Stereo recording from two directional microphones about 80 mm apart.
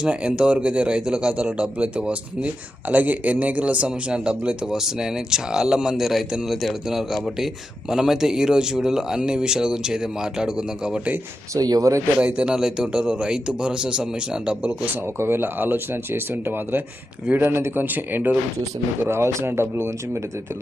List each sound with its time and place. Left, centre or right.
0.0 s a man's voice: centre
11.5 s speech: right
12.2 s a man's voice: centre
15.2 s speech: right
19.0 s speech: right